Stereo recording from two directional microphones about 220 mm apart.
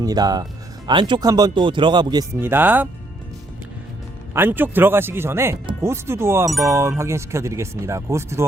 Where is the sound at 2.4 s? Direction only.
10° right (ahead or behind).